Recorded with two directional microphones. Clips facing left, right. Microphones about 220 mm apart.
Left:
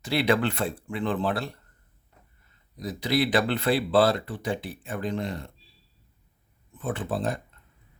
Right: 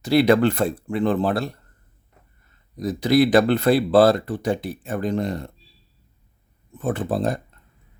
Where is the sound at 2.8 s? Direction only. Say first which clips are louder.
Right 8 dB; 45° right (ahead or behind).